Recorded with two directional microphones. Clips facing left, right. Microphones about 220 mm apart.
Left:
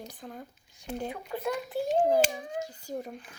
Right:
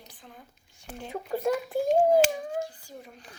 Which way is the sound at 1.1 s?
45° right (ahead or behind).